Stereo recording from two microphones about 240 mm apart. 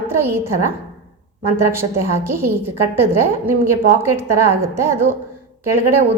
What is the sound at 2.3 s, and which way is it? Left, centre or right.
Speech, centre.